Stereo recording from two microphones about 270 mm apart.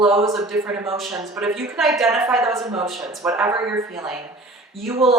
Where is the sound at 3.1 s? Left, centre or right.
Centre.